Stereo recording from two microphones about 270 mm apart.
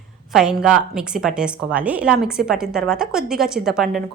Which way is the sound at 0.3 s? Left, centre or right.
Centre.